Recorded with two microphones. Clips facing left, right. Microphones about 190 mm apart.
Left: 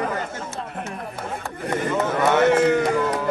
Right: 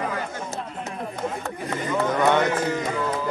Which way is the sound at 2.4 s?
65° left (ahead or behind).